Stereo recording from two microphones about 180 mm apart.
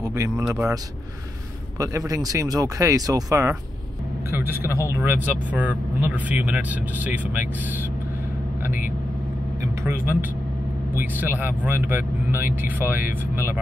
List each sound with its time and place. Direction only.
0.0 s speech: 15° right (ahead or behind)
1.8 s speech: 20° right (ahead or behind)
8.6 s vehicle: 10° right (ahead or behind)
11.1 s speech: 10° right (ahead or behind)